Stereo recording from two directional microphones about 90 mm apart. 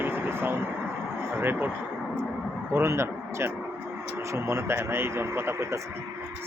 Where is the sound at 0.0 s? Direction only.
25° right (ahead or behind).